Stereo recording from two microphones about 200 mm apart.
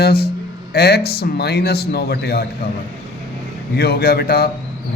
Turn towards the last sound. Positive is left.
turn(degrees=50)  # may be behind; listen again after turning